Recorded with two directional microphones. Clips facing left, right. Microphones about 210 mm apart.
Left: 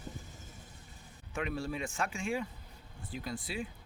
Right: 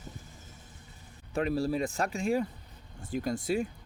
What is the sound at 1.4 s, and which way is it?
Speech, 35° right (ahead or behind).